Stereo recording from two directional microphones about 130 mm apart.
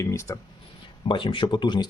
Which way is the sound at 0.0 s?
20° left (ahead or behind).